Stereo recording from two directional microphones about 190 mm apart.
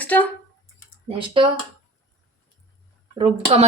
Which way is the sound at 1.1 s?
25° right (ahead or behind).